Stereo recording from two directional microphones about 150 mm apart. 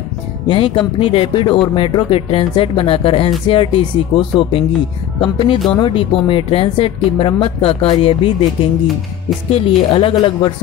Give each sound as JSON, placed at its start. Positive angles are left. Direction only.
{"t": 0.5, "sound": "speech", "side_deg": 35}
{"t": 9.5, "sound": "speech", "side_deg": 40}